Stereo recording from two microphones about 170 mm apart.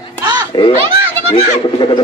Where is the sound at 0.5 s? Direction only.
30° left (ahead or behind).